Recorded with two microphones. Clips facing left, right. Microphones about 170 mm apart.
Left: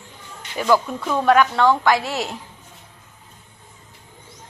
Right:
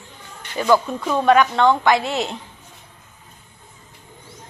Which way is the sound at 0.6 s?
10° left (ahead or behind).